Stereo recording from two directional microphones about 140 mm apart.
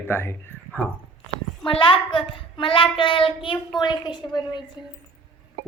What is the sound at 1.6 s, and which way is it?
A child's voice, 40° left (ahead or behind).